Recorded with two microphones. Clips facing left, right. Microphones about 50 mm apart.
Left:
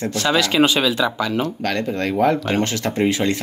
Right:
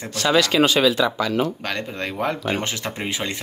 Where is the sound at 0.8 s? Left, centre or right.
Left.